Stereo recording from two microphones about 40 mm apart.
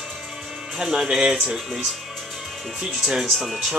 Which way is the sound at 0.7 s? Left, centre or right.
Centre.